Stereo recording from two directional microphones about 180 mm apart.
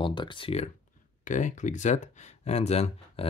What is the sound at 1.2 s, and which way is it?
Speech, 45° left (ahead or behind).